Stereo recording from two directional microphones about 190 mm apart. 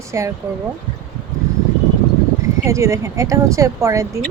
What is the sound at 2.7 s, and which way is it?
Speech, 15° right (ahead or behind).